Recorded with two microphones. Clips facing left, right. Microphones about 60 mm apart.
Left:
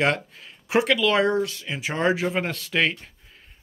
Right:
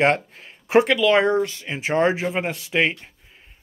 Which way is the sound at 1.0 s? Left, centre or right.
Centre.